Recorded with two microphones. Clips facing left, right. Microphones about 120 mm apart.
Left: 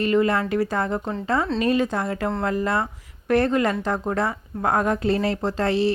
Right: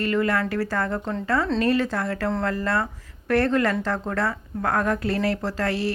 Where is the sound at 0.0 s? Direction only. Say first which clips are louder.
Left 3 dB; 20° left (ahead or behind).